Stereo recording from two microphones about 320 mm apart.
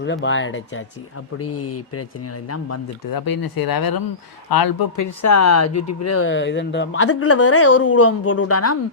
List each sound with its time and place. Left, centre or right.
0.0 s a woman's voice: left
3.1 s speech: left
6.2 s a woman's voice: left